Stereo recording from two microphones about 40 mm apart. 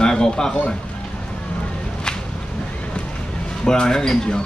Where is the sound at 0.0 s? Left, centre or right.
Centre.